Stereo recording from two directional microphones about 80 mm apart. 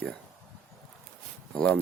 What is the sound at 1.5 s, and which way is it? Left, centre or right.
Speech, centre.